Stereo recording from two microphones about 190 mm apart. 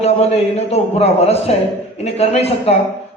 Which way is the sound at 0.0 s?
35° left (ahead or behind).